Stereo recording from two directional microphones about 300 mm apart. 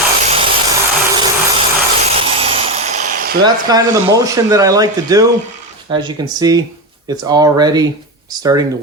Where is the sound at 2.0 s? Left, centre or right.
Centre.